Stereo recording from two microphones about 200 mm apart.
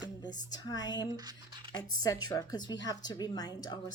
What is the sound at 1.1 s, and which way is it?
Scratch, 20° right (ahead or behind).